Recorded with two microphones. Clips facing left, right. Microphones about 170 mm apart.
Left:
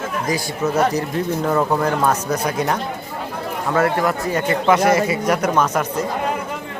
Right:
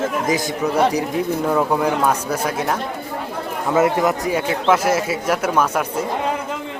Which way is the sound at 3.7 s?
20° right (ahead or behind).